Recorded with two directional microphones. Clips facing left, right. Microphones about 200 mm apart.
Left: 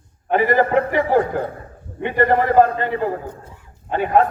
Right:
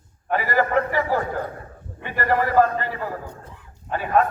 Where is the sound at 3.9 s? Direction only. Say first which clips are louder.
Left 4 dB; 25° left (ahead or behind).